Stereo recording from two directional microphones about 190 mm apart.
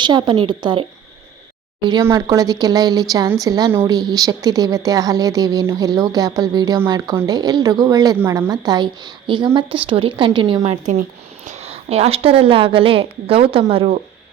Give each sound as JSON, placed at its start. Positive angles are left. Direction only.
{"t": 0.0, "sound": "speech", "side_deg": -25}
{"t": 10.6, "sound": "speech", "side_deg": -40}